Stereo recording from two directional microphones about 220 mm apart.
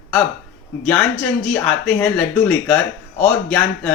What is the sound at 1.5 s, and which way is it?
Speech, 5° left (ahead or behind).